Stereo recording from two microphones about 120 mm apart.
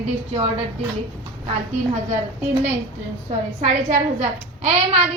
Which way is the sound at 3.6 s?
80° right.